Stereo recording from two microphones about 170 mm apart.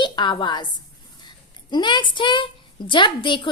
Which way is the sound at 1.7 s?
25° left (ahead or behind).